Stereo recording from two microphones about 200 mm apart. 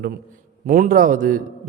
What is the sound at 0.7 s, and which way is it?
A man's voice, 45° right (ahead or behind).